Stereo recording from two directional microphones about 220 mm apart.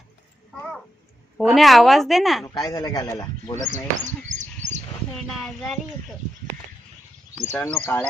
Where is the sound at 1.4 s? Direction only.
Centre (ahead or behind).